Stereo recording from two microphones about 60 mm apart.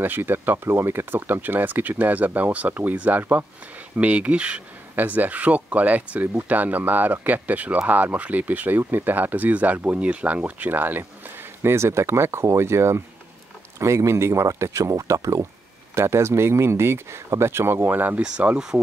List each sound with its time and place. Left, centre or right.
0.0 s speech: right
11.6 s speech: right
15.9 s speech: right